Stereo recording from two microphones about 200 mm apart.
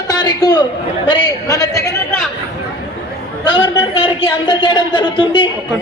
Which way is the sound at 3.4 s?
25° left (ahead or behind).